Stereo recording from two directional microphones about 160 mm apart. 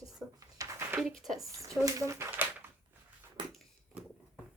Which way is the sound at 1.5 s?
20° right (ahead or behind).